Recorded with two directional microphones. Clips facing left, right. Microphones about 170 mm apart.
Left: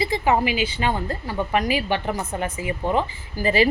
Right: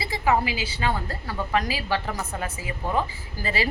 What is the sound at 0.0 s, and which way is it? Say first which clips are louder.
A woman's voice: left 3 dB; 20° left (ahead or behind).